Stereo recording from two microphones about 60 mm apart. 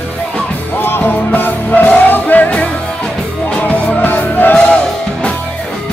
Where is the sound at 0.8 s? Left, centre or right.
Left.